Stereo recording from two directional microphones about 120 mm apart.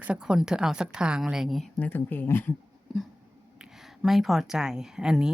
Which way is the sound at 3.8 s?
Centre (ahead or behind).